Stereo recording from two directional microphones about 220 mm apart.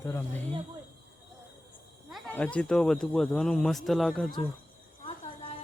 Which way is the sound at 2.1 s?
5° left (ahead or behind).